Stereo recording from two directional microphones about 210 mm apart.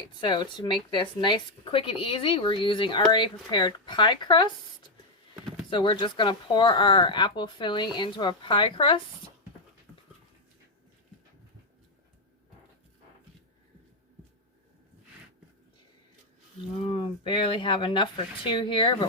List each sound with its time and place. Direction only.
0.2 s speech: 20° left (ahead or behind)
16.8 s speech: 25° left (ahead or behind)